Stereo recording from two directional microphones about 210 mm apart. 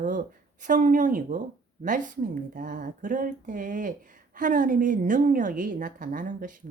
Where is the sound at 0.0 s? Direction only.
40° right (ahead or behind).